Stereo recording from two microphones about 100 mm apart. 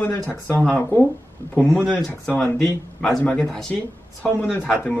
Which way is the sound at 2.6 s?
5° left (ahead or behind).